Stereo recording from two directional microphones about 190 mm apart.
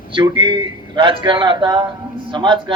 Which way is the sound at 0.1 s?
25° right (ahead or behind).